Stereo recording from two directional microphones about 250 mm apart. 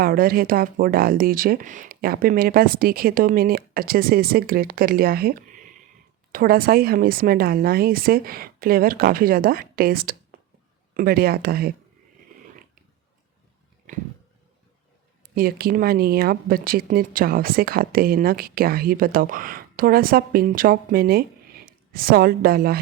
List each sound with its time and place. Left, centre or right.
0.0 s speech: right
15.2 s speech: right